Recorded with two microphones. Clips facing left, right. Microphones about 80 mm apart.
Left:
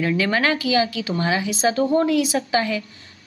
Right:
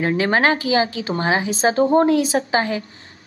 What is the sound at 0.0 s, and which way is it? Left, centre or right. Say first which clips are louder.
A woman's voice: right 3 dB; right.